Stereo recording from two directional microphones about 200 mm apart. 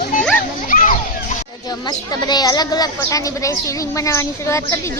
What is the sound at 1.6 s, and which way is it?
A woman's voice, 20° left (ahead or behind).